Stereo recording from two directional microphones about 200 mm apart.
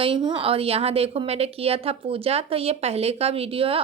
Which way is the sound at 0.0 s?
25° right (ahead or behind).